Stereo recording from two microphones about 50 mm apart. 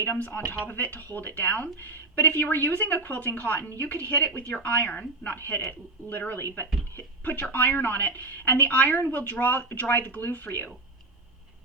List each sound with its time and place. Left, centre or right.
0.1 s speech: left
6.9 s a sound: left
7.5 s speech: left